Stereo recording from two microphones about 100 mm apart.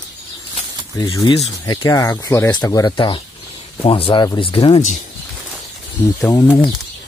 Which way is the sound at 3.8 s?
65° left (ahead or behind).